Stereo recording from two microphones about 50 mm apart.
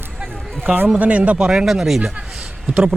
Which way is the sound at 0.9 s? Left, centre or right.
Right.